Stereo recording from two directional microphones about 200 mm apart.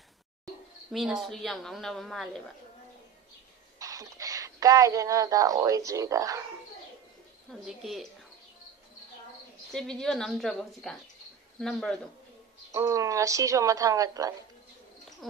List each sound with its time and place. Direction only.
0.9 s a woman's voice: centre (ahead or behind)
3.8 s speech: 15° right (ahead or behind)
7.6 s a woman's voice: centre (ahead or behind)
9.7 s a woman's voice: 5° left (ahead or behind)
12.7 s a woman's voice: 15° right (ahead or behind)